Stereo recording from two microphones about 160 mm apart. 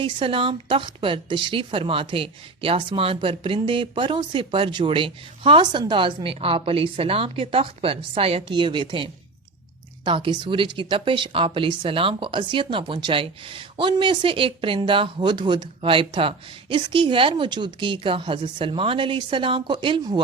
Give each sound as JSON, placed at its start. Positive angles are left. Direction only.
{"t": 0.0, "sound": "a woman's voice", "side_deg": -35}